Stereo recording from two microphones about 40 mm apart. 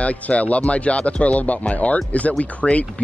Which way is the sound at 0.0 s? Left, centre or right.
Left.